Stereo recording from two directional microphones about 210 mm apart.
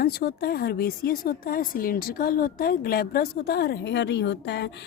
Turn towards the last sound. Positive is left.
turn(degrees=55)  # may be behind; listen again after turning